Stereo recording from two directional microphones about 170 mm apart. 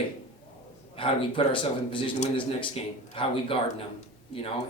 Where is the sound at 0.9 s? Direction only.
30° left (ahead or behind).